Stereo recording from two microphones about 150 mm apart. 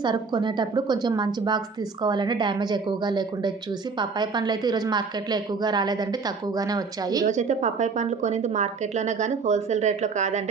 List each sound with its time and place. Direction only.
0.0 s a woman's voice: 30° right (ahead or behind)
7.3 s a woman's voice: 50° right (ahead or behind)